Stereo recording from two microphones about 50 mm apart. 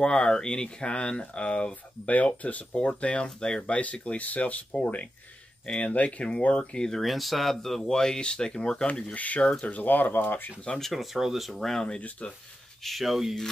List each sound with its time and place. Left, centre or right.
0.0 s speech: centre
3.7 s speech: left
5.8 s speech: left
6.8 s speech: centre; by 10.5 s left
10.8 s speech: centre
12.8 s speech: centre